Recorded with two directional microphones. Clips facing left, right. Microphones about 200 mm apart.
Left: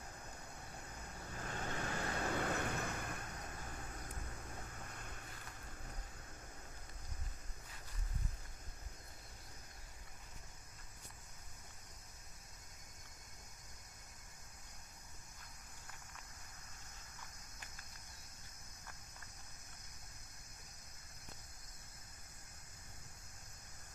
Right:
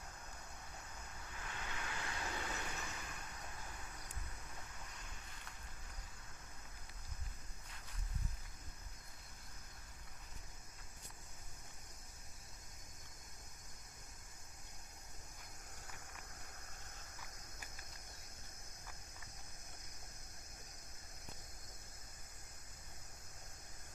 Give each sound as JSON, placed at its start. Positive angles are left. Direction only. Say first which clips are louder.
{"t": 1.4, "sound": "vehicle", "louder": "left 6 dB", "side_deg": 40}
{"t": 4.9, "sound": "vehicle", "louder": "left 4 dB", "side_deg": 50}